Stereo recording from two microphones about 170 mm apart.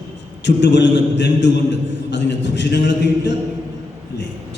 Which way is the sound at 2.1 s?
90° left.